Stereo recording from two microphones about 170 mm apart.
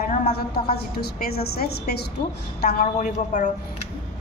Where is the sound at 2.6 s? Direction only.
55° left (ahead or behind).